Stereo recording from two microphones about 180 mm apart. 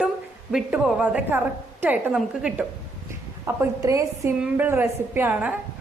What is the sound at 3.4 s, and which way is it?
A woman's voice, 15° right (ahead or behind).